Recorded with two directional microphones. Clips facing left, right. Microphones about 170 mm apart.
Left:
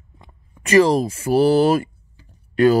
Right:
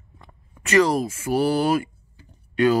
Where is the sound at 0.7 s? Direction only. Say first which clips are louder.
Left 4 dB; 30° left (ahead or behind).